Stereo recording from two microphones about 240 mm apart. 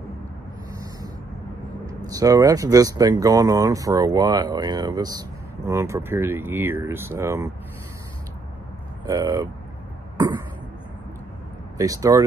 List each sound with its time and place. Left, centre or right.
1.9 s speech: centre
9.0 s speech: centre
11.8 s speech: centre